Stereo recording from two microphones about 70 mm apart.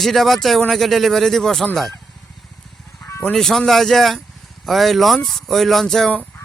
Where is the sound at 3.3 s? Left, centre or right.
Centre.